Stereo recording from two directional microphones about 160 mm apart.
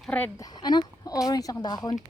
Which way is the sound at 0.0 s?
10° left (ahead or behind).